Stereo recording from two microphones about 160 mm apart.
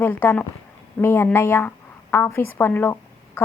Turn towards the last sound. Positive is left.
turn(degrees=15)  # may be behind; listen again after turning